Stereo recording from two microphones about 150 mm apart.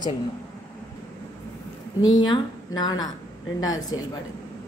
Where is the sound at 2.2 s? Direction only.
30° left (ahead or behind).